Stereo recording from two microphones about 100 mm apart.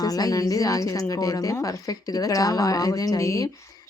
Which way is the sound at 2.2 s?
35° left (ahead or behind).